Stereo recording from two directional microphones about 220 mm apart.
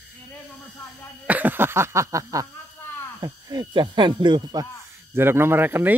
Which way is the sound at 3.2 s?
20° right (ahead or behind).